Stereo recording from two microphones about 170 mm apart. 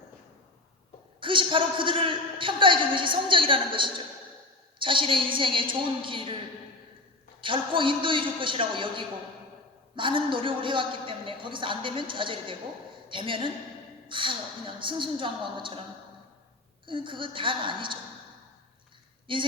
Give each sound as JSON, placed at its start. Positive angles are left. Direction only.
{"t": 1.2, "sound": "a man's voice", "side_deg": -30}
{"t": 7.4, "sound": "a man's voice", "side_deg": -30}
{"t": 16.8, "sound": "a man's voice", "side_deg": -30}
{"t": 19.3, "sound": "a man's voice", "side_deg": -30}